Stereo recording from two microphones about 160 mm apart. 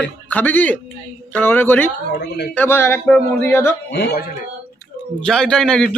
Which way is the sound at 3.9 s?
85° left.